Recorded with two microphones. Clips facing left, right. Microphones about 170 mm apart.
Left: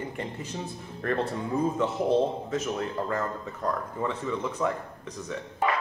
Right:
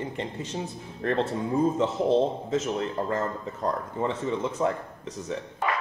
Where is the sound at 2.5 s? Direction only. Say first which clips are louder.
Right 2 dB; 25° right (ahead or behind).